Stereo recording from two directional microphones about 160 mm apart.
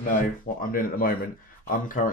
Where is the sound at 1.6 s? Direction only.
55° left (ahead or behind).